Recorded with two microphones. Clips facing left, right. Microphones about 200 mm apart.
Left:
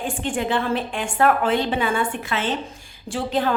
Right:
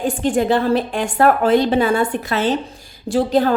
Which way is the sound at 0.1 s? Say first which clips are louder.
Right 7 dB; 40° right (ahead or behind).